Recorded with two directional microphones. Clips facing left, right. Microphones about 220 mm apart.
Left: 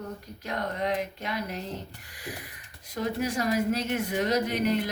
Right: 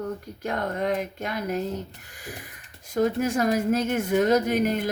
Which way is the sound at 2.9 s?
50° right (ahead or behind).